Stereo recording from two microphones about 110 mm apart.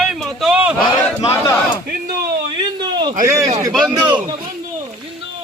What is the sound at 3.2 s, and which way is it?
Speech, 30° right (ahead or behind).